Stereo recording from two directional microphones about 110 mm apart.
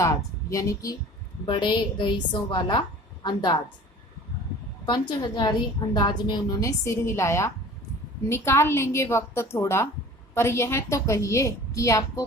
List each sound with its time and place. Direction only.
0.5 s a woman's voice: 30° left (ahead or behind)
1.5 s a woman's voice: 45° left (ahead or behind)
4.9 s a woman's voice: 40° left (ahead or behind)
6.6 s a woman's voice: 30° left (ahead or behind)